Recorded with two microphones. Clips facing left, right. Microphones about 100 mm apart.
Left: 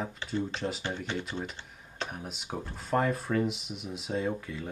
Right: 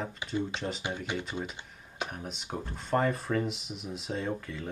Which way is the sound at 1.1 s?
5° right (ahead or behind).